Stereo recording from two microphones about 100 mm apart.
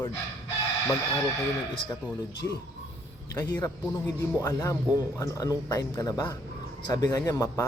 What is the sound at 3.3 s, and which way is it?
Speech, 40° left (ahead or behind).